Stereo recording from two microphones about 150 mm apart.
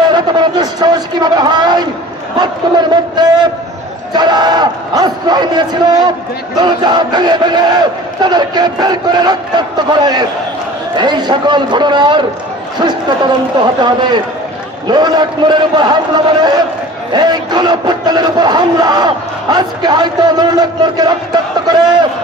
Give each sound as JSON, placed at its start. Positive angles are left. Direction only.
{"t": 0.1, "sound": "a sound", "side_deg": -30}
{"t": 2.3, "sound": "crowd", "side_deg": -30}
{"t": 13.6, "sound": "crowd", "side_deg": -30}
{"t": 17.1, "sound": "crowd", "side_deg": -30}